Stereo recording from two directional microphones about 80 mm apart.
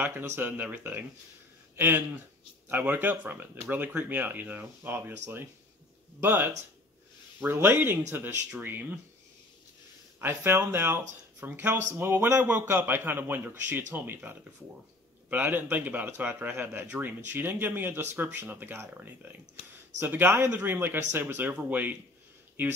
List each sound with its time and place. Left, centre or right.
0.0 s a man's voice: right
7.5 s a man's voice: right
10.2 s a man's voice: right